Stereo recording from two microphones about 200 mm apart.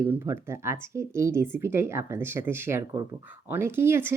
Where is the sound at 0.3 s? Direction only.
15° right (ahead or behind).